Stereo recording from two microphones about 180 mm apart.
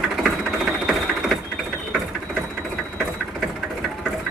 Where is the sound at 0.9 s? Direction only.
Centre (ahead or behind).